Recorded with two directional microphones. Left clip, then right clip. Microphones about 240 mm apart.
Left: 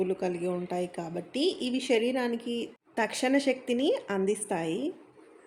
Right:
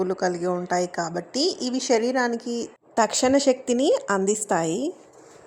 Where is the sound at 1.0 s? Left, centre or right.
Centre.